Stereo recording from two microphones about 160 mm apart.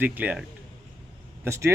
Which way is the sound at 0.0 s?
10° right (ahead or behind).